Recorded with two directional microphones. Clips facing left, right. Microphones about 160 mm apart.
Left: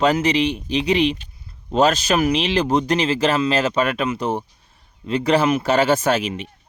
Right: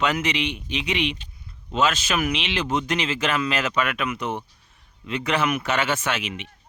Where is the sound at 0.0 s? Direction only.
35° left (ahead or behind).